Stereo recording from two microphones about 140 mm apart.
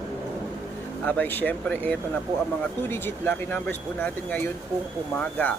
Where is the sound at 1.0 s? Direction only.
15° left (ahead or behind).